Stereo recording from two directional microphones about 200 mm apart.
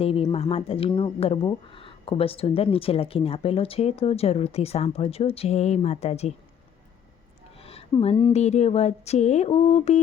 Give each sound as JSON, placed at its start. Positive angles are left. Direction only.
{"t": 0.0, "sound": "speech", "side_deg": 25}
{"t": 7.6, "sound": "speech", "side_deg": 30}